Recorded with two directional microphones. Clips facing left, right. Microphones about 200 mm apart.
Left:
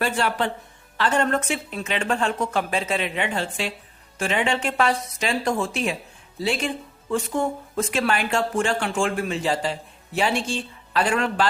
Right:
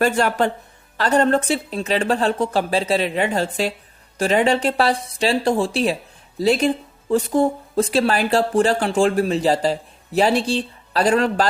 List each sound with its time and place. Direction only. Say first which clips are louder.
0.0 s speech: right 6 dB; 45° right (ahead or behind)